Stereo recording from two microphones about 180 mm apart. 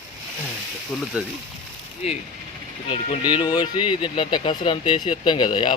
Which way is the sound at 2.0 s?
35° left (ahead or behind).